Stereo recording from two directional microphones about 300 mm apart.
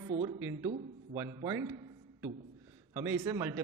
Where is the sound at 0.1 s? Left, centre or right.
Centre.